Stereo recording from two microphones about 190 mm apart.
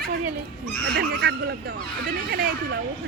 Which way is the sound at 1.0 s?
60° right (ahead or behind).